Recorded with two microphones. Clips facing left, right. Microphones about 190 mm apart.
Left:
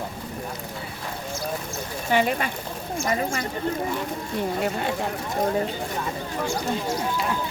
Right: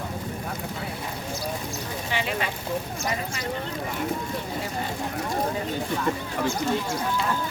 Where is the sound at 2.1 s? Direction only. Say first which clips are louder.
Left 7 dB; 45° left (ahead or behind).